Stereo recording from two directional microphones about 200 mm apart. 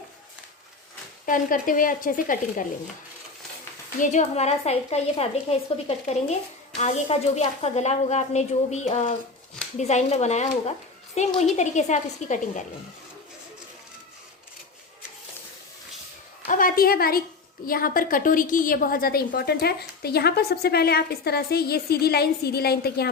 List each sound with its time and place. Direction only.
1.2 s a woman's voice: 45° left (ahead or behind)
4.0 s a woman's voice: 35° left (ahead or behind)
10.7 s a sound: 35° left (ahead or behind)
11.5 s a woman's voice: 35° left (ahead or behind)
16.5 s a woman's voice: 45° left (ahead or behind)